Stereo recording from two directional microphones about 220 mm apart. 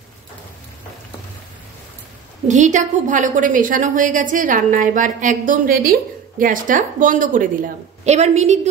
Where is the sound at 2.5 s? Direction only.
35° right (ahead or behind).